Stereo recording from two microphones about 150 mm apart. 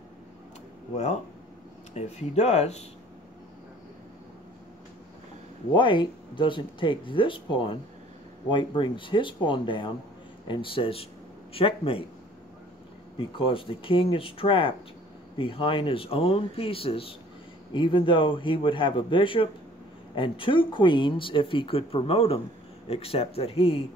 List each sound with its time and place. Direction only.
0.9 s speech: 50° left (ahead or behind)
5.7 s speech: 35° left (ahead or behind)
13.2 s speech: 35° left (ahead or behind)